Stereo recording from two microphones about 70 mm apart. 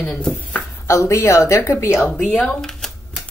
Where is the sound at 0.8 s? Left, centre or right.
Left.